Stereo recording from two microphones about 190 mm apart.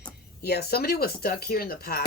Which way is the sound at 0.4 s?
55° left (ahead or behind).